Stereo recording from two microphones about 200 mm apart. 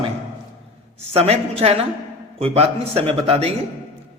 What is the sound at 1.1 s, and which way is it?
A man's voice, 30° right (ahead or behind).